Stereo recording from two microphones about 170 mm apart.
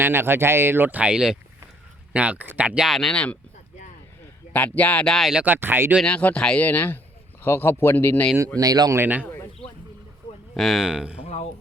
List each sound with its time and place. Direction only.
0.0 s speech: 15° right (ahead or behind); by 3.3 s 5° left (ahead or behind)
4.5 s speech: 10° left (ahead or behind); by 6.0 s 10° right (ahead or behind)
6.0 s speech: 5° left (ahead or behind)
8.5 s speech: 20° right (ahead or behind)
9.2 s a sound: 10° left (ahead or behind)
10.5 s speech: centre (ahead or behind)
11.2 s speech: 40° left (ahead or behind)